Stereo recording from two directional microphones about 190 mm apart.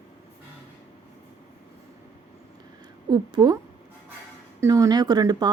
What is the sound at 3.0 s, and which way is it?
Speech, 20° right (ahead or behind).